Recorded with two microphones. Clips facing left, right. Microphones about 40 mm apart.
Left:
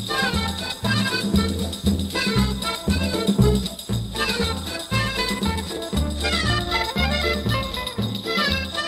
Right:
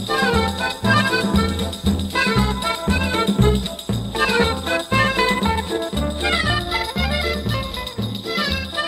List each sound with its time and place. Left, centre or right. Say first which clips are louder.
0.3 s music: right 7 dB; right
4.6 s music: right 8 dB; right
6.7 s music: right 1 dB; centre